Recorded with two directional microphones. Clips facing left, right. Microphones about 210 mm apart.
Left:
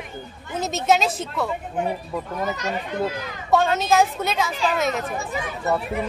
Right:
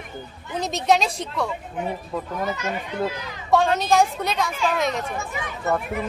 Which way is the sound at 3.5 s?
Centre (ahead or behind).